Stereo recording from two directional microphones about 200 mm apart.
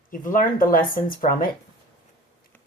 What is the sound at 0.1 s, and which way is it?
Speech, 45° left (ahead or behind).